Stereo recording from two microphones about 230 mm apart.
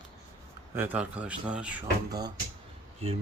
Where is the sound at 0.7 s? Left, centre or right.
Centre.